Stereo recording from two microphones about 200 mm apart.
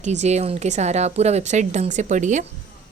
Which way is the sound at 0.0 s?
35° right (ahead or behind).